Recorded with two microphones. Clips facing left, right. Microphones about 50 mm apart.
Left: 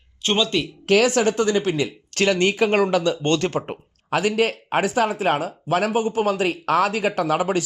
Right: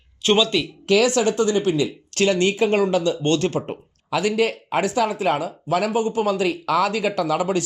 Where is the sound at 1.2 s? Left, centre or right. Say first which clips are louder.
Even; left.